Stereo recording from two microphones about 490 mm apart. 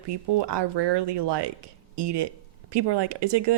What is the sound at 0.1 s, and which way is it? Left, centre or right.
Speech, right.